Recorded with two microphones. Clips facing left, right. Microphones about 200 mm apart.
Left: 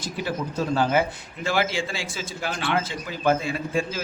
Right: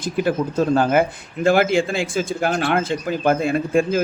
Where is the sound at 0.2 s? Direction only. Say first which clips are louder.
Right 8 dB; 50° right (ahead or behind).